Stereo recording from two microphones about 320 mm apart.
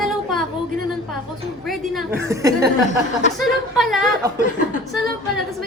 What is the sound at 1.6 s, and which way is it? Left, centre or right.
A woman's voice, centre.